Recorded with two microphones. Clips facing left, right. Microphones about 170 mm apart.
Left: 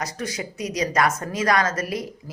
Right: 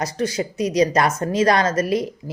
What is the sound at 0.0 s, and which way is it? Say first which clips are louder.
Speech: right 7 dB; 30° right (ahead or behind).